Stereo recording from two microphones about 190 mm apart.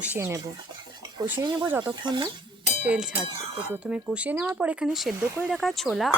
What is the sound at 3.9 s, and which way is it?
Speech, 5° right (ahead or behind).